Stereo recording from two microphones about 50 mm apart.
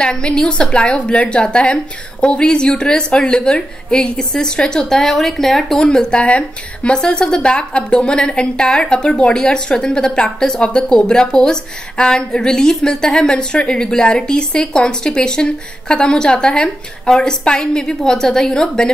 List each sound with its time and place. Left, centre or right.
0.0 s a woman's voice: centre